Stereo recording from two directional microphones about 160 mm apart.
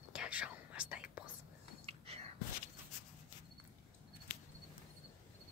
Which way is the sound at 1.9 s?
40° right (ahead or behind).